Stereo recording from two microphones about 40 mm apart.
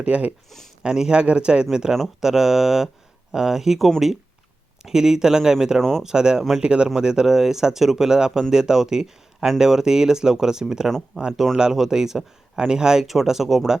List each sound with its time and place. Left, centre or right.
0.0 s speech: right
0.8 s a man's voice: centre
13.1 s speech: centre